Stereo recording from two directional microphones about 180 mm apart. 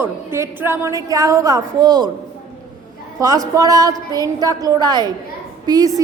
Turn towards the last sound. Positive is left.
turn(degrees=-20)  # may be behind; listen again after turning